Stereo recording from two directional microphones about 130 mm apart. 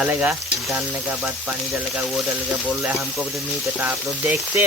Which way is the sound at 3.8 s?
15° right (ahead or behind).